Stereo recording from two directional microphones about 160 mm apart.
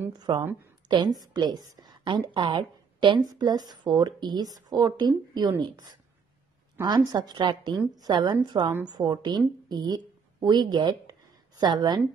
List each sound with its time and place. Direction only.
0.2 s a woman's voice: 25° right (ahead or behind)